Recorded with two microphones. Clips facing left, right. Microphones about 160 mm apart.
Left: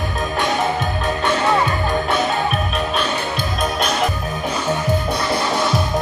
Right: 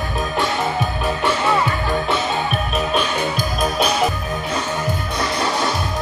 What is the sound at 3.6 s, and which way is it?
Music, centre (ahead or behind).